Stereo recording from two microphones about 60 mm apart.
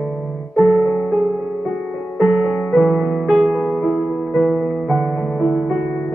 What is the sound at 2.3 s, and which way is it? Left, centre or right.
Music, centre.